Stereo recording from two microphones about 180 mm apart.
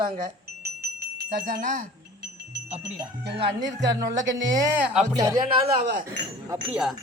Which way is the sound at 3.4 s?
25° right (ahead or behind).